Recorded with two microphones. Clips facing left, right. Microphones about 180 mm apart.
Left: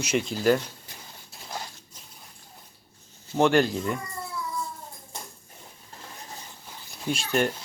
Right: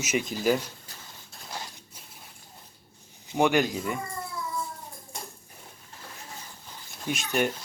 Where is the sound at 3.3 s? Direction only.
15° right (ahead or behind).